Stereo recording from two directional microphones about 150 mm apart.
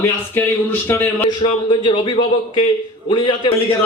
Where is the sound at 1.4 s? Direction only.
35° left (ahead or behind).